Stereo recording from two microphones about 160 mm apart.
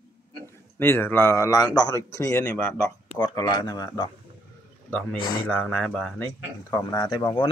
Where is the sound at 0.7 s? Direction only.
15° left (ahead or behind).